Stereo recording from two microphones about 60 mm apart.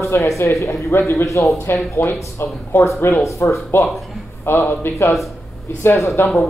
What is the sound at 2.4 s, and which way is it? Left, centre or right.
Speech, left.